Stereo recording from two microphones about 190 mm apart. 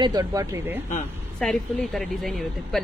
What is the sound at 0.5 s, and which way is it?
Speech, 10° right (ahead or behind).